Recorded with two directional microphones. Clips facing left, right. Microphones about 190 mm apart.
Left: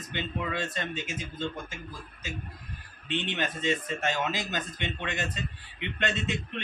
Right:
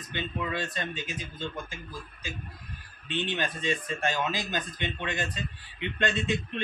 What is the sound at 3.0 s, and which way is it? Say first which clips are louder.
A man's voice: even; 20° left (ahead or behind).